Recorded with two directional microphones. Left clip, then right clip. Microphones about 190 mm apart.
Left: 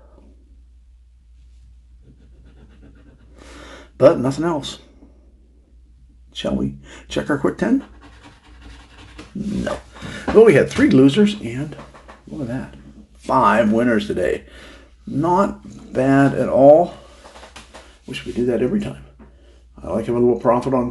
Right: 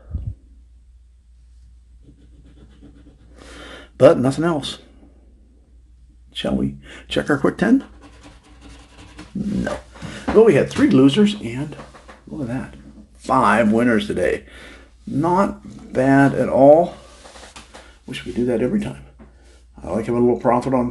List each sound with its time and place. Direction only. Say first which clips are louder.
3.6 s a sound: right 1 dB; 20° right (ahead or behind)
6.3 s speech: even; 20° right (ahead or behind)
10.4 s speech: left 2 dB; 10° left (ahead or behind); by 16.9 s 10° right (ahead or behind)
18.1 s speech: left 1 dB; 10° right (ahead or behind)